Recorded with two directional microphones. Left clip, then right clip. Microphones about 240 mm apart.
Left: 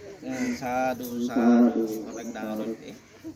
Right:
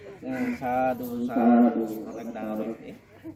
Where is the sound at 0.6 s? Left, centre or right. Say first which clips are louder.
Right 2 dB; centre.